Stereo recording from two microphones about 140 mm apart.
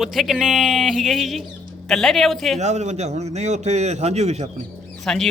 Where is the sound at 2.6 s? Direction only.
55° right (ahead or behind).